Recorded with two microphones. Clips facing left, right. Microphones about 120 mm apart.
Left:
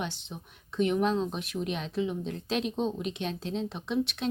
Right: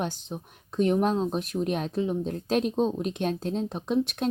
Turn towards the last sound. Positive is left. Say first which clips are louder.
# right 4 dB
turn(degrees=-45)  # may be behind; listen again after turning